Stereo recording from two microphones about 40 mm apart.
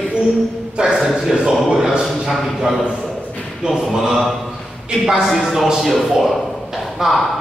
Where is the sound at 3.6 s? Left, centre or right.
Right.